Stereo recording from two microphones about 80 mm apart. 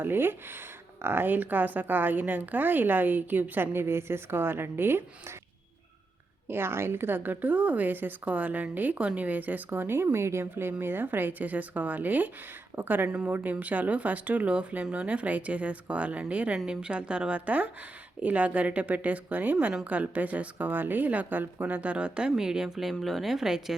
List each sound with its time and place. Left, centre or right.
0.0 s a woman's voice: right
6.5 s a woman's voice: right; by 23.7 s centre